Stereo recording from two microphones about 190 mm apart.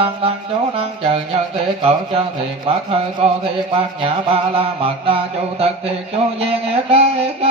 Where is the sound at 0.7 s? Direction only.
30° right (ahead or behind).